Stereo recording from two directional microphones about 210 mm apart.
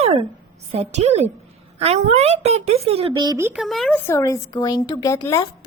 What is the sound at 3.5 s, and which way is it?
Speech, centre (ahead or behind).